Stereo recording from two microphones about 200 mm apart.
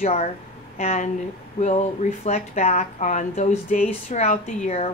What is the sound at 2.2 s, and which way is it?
Speech, 35° left (ahead or behind).